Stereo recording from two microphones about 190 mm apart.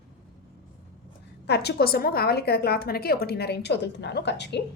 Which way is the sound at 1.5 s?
60° left (ahead or behind).